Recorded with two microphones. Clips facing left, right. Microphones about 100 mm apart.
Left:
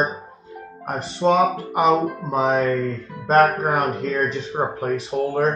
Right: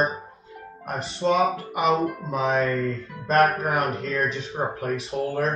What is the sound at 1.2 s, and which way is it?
Music, 30° left (ahead or behind).